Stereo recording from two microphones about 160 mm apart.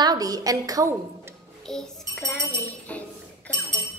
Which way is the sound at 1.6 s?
5° left (ahead or behind).